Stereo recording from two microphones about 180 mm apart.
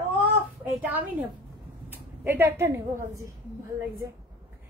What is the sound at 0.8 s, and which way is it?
A woman's voice, 10° right (ahead or behind).